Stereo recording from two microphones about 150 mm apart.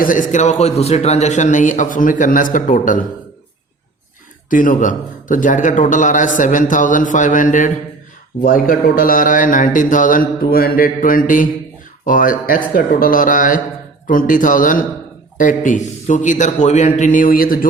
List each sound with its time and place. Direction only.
0.0 s a man's voice: 60° left (ahead or behind)
4.4 s a man's voice: 65° left (ahead or behind)
8.4 s a man's voice: 70° left (ahead or behind)